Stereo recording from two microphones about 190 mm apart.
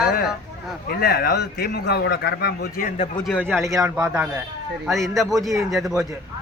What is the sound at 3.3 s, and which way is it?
Speech, 5° left (ahead or behind).